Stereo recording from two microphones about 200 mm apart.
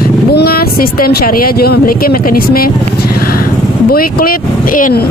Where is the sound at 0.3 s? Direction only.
50° left (ahead or behind).